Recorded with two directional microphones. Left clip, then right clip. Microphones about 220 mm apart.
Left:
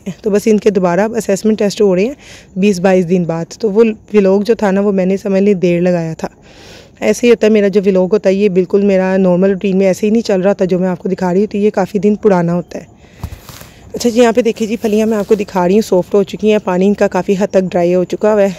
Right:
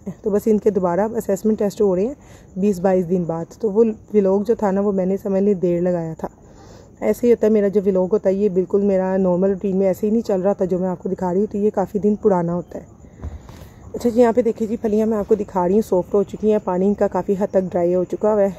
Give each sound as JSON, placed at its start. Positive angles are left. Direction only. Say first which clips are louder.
{"t": 0.0, "sound": "speech", "louder": "left 7 dB", "side_deg": 20}
{"t": 3.3, "sound": "speech", "louder": "left 6 dB", "side_deg": 35}
{"t": 3.7, "sound": "speech", "louder": "left 6 dB", "side_deg": 20}
{"t": 12.4, "sound": "speech", "louder": "left 7 dB", "side_deg": 40}
{"t": 13.9, "sound": "speech", "louder": "left 5 dB", "side_deg": 25}